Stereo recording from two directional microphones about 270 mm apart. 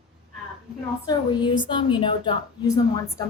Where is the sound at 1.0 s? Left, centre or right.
Centre.